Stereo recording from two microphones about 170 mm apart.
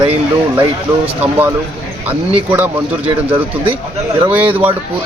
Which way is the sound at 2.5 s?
10° right (ahead or behind).